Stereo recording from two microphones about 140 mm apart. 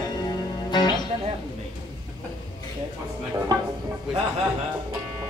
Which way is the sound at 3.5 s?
30° right (ahead or behind).